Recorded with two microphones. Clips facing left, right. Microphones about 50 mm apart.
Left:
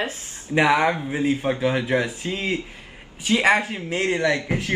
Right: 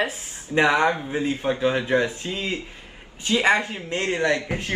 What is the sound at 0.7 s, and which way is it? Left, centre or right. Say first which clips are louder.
Speech: even; left.